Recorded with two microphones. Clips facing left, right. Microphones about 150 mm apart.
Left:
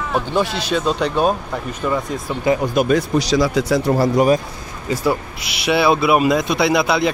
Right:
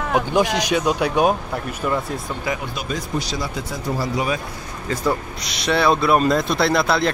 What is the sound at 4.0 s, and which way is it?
Speech, 50° left (ahead or behind).